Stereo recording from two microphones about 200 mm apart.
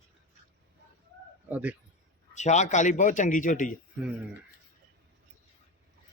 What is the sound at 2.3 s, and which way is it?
A man's voice, 35° left (ahead or behind).